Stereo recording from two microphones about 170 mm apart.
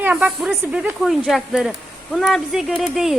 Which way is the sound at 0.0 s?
10° right (ahead or behind).